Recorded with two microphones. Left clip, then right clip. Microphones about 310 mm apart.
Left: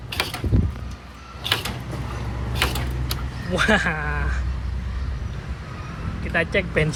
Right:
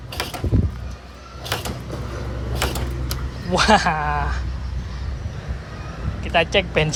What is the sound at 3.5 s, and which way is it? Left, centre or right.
Speech, centre.